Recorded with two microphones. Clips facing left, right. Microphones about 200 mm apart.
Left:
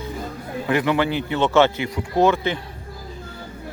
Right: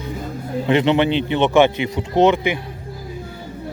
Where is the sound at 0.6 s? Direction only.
25° right (ahead or behind).